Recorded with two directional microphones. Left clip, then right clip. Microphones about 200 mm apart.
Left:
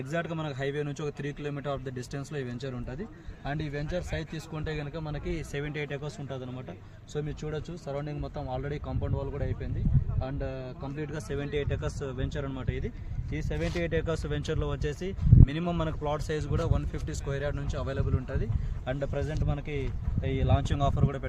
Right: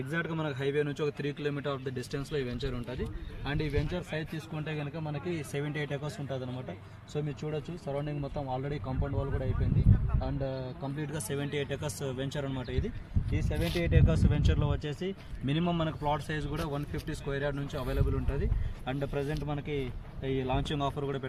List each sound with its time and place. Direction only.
0.1 s speech: 30° left (ahead or behind); by 4.0 s 55° left (ahead or behind)
4.5 s a man's voice: 15° left (ahead or behind)
5.0 s speech: centre (ahead or behind)
5.5 s speech: 15° right (ahead or behind)
7.1 s speech: 10° right (ahead or behind)
7.4 s speech: centre (ahead or behind)
10.9 s speech: 40° right (ahead or behind)
13.3 s speech: 5° right (ahead or behind); by 21.2 s 20° left (ahead or behind)